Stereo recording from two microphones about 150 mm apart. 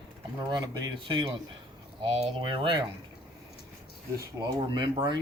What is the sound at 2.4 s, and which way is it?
Speech, 35° right (ahead or behind).